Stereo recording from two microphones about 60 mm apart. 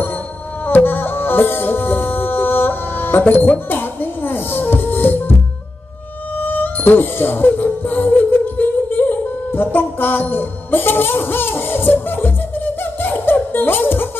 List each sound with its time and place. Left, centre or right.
0.7 s music: left
6.3 s music: left